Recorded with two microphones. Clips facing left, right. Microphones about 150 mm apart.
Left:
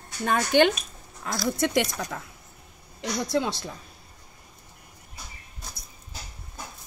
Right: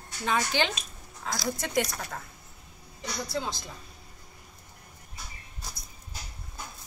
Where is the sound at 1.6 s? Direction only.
85° left.